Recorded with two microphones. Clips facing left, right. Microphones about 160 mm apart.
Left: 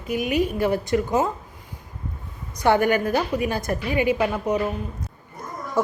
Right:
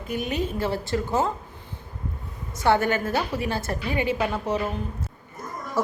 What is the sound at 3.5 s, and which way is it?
Speech, 25° right (ahead or behind).